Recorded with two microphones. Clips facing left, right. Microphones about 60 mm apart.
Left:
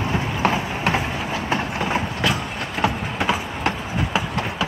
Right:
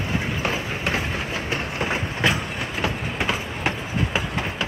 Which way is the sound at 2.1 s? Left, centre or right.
Right.